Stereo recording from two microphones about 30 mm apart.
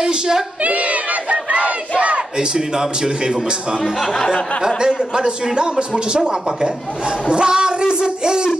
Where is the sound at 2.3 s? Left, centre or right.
Right.